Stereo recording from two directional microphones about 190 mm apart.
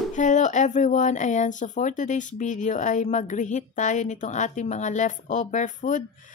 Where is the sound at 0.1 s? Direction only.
40° left (ahead or behind).